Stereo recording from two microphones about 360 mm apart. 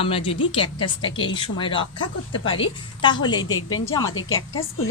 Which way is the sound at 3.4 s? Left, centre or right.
Left.